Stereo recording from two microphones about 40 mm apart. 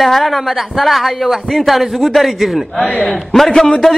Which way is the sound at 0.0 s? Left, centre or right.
Centre.